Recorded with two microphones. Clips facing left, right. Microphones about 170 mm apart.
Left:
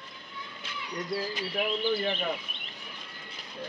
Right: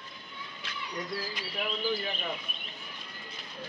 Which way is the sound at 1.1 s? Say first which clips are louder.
Left 7 dB; 30° left (ahead or behind).